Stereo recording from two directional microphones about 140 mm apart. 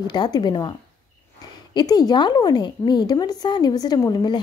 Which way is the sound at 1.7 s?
30° left (ahead or behind).